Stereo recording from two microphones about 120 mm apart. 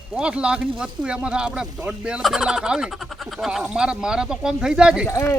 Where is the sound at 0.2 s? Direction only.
10° right (ahead or behind).